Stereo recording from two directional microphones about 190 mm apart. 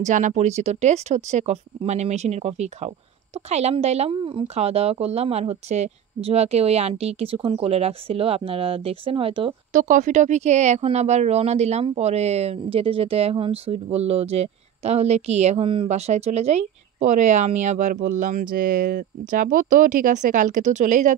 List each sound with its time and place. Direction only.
0.0 s speech: 40° right (ahead or behind)
9.7 s speech: 45° right (ahead or behind)